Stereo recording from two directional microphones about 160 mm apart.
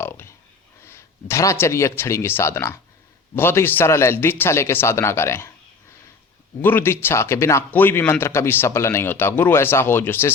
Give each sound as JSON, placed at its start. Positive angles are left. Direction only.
{"t": 0.0, "sound": "a sound", "side_deg": 15}
{"t": 0.9, "sound": "speech", "side_deg": 15}
{"t": 6.6, "sound": "speech", "side_deg": 15}